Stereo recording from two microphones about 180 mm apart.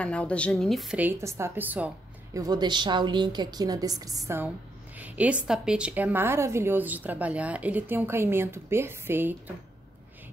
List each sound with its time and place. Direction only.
0.0 s a woman's voice: 5° left (ahead or behind); by 1.9 s 10° right (ahead or behind)
2.3 s a woman's voice: 20° right (ahead or behind)
4.9 s a woman's voice: 10° right (ahead or behind)